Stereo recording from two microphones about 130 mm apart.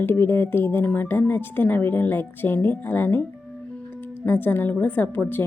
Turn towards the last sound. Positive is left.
turn(degrees=15)  # may be behind; listen again after turning